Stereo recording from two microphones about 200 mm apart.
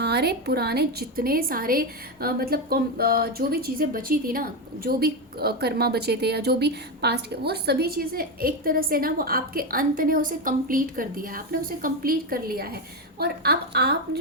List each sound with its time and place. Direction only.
0.0 s a woman's voice: 55° right (ahead or behind)